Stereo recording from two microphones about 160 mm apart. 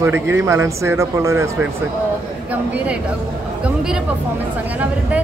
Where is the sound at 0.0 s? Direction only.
15° right (ahead or behind).